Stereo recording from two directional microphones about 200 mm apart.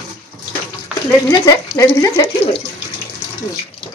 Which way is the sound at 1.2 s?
20° left (ahead or behind).